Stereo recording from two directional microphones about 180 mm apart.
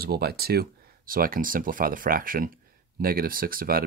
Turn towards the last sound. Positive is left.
turn(degrees=-55)  # may be behind; listen again after turning